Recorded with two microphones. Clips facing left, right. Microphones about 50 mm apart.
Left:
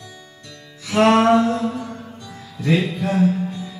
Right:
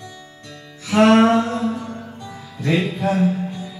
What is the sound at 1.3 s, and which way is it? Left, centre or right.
Mantra, centre.